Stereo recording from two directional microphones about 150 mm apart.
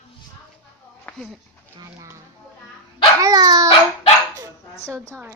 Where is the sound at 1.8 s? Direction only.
25° right (ahead or behind).